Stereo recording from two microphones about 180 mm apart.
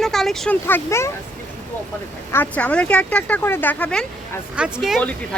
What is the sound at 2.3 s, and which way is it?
Speech, 10° left (ahead or behind).